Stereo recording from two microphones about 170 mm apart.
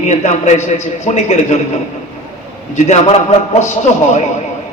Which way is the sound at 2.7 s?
45° left (ahead or behind).